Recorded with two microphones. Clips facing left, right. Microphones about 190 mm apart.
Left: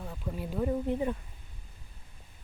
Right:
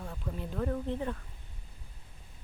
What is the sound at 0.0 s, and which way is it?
Speech, 5° left (ahead or behind).